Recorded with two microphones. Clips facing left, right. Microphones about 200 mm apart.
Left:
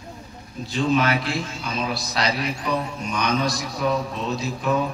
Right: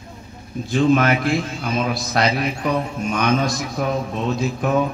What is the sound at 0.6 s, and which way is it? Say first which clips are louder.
A man's voice: right 5 dB; 50° right (ahead or behind).